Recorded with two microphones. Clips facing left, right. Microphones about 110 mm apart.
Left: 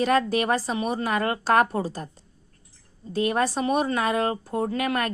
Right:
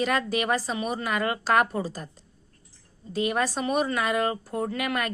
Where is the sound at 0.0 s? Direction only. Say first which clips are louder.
Left 4 dB; 35° left (ahead or behind).